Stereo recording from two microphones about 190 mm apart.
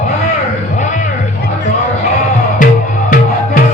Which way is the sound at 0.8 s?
40° left (ahead or behind).